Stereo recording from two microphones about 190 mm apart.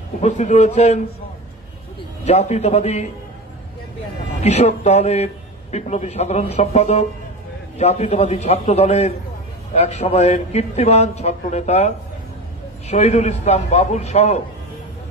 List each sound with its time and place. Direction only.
0.2 s a man's voice: 40° left (ahead or behind)
2.2 s a man's voice: 35° left (ahead or behind)
4.4 s a man's voice: 35° left (ahead or behind)